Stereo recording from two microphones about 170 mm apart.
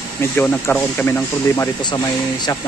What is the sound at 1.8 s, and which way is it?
Speech, 25° left (ahead or behind).